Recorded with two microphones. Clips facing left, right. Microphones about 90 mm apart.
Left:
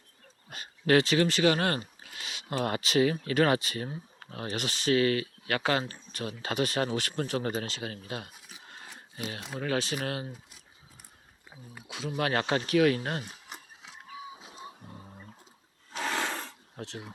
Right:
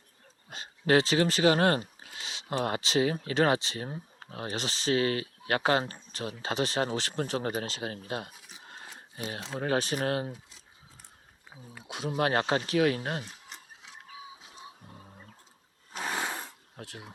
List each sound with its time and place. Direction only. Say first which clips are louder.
0.5 s speech: even; 25° right (ahead or behind)
8.4 s a sound: right 1 dB; 25° right (ahead or behind)
9.2 s speech: right 1 dB; 25° right (ahead or behind)
12.0 s speech: right 2 dB; 25° right (ahead or behind)
15.9 s a sound: left 2 dB; 10° right (ahead or behind)
16.8 s speech: left 4 dB; 10° right (ahead or behind)